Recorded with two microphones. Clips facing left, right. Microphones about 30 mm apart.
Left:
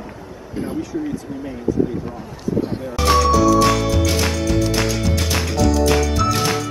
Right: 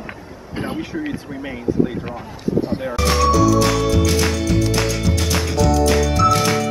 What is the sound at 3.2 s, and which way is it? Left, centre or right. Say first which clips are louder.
Music: right 1 dB; centre.